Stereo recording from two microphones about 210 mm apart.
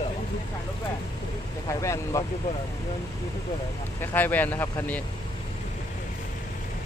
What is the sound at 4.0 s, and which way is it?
Speech, 10° left (ahead or behind).